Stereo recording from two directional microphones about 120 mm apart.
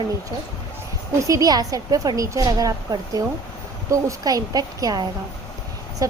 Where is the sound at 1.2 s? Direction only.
30° right (ahead or behind).